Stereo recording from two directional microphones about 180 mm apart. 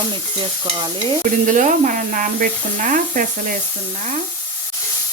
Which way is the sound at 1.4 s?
45° right (ahead or behind).